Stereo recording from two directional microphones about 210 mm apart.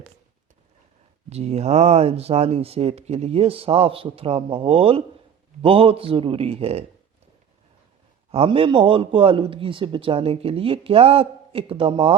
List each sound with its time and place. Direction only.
1.3 s a man's voice: 30° right (ahead or behind)
8.3 s a man's voice: 25° right (ahead or behind)